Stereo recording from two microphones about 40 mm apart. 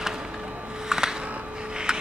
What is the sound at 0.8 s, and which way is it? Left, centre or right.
Music, centre.